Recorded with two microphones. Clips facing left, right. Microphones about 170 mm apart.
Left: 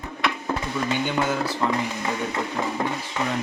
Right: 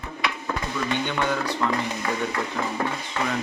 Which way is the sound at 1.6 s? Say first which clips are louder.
Left 1 dB; 20° left (ahead or behind).